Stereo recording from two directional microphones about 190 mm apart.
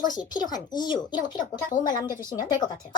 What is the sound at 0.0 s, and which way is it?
A woman's voice, 20° left (ahead or behind).